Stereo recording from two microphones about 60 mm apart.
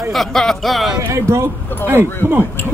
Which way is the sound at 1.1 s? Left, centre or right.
Right.